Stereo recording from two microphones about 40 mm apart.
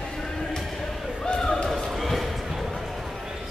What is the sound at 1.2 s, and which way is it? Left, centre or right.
Slam, centre.